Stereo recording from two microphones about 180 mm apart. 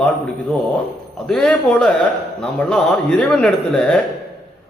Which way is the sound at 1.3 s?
5° left (ahead or behind).